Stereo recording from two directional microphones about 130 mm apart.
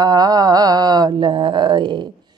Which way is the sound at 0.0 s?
30° right (ahead or behind).